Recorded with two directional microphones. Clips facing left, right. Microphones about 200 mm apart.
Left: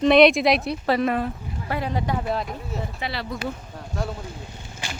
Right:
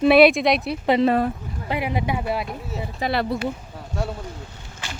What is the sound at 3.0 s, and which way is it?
Speech, 55° right (ahead or behind).